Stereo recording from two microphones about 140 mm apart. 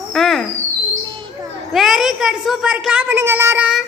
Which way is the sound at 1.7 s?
Centre (ahead or behind).